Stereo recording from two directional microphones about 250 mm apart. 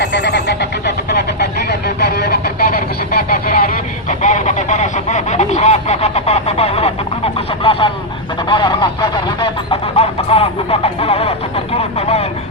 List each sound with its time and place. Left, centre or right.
0.0 s telephone bell ringing: left
2.0 s vehicle: left
4.2 s speech: left
11.9 s vehicle: left